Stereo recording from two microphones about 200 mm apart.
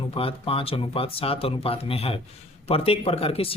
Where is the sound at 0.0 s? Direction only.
30° left (ahead or behind).